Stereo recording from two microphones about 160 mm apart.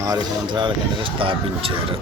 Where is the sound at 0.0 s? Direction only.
25° right (ahead or behind).